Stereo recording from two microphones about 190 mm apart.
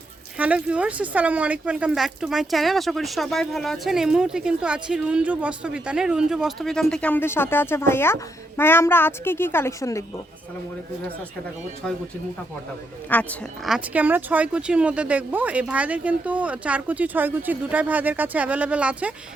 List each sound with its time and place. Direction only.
0.3 s speech: 5° right (ahead or behind); by 10.0 s 15° left (ahead or behind)
13.1 s speech: 10° left (ahead or behind)
13.7 s speech: 5° right (ahead or behind)